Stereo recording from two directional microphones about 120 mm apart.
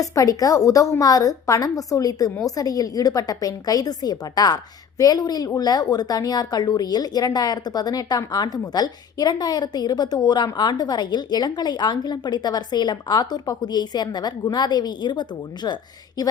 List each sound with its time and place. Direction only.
0.0 s a woman's voice: 30° left (ahead or behind)